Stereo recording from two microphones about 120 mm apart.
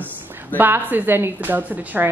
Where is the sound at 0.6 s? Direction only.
15° right (ahead or behind).